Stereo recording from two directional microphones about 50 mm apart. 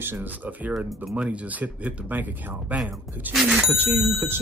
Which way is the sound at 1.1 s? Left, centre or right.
Right.